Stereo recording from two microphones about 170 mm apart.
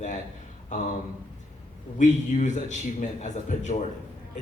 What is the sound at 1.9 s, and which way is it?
A man's voice, 45° left (ahead or behind).